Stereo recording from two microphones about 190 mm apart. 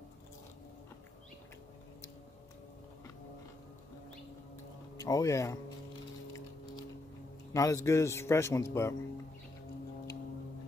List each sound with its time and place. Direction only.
4.9 s speech: 20° left (ahead or behind)
7.5 s a man's voice: 15° left (ahead or behind)